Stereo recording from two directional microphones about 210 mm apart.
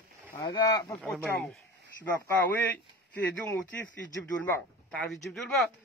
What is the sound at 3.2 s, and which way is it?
Speech, 10° left (ahead or behind).